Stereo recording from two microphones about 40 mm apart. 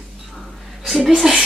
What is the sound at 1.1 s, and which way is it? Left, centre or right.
Speech, centre.